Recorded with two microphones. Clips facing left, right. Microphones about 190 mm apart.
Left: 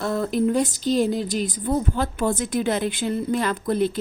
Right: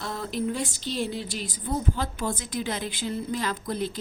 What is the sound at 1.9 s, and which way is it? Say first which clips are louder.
A woman's voice: left 7 dB; 55° left (ahead or behind).